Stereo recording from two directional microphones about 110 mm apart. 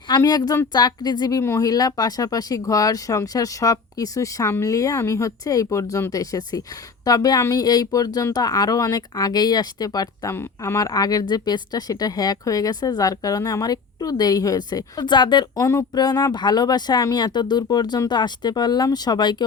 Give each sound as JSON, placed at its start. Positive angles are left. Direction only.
{"t": 0.2, "sound": "speech", "side_deg": 35}
{"t": 10.3, "sound": "speech", "side_deg": 25}
{"t": 15.5, "sound": "speech", "side_deg": 30}